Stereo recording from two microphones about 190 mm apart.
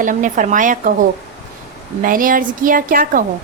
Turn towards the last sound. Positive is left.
turn(degrees=-45)  # may be behind; listen again after turning